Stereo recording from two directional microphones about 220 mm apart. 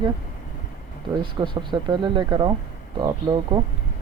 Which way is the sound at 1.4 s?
20° right (ahead or behind).